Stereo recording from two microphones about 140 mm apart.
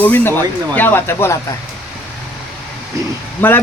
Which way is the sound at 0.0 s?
15° left (ahead or behind).